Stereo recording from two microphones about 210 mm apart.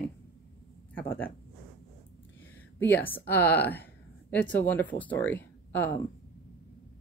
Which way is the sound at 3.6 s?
10° left (ahead or behind).